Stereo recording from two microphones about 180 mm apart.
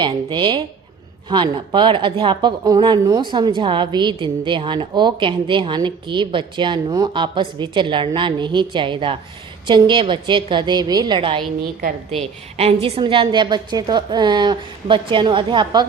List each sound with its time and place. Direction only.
0.0 s speech: 25° right (ahead or behind)
12.5 s speech: 35° right (ahead or behind)